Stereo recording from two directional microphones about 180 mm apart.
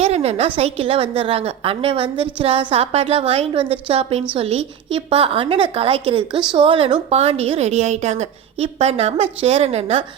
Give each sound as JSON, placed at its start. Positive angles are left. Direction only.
{"t": 0.0, "sound": "a woman's voice", "side_deg": -35}